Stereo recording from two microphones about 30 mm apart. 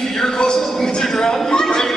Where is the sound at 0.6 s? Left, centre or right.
Centre.